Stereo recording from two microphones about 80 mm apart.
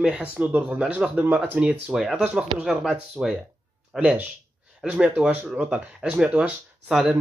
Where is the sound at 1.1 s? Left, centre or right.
Right.